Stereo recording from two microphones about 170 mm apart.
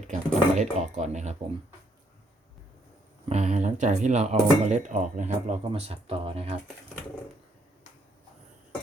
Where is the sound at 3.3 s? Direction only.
40° right (ahead or behind).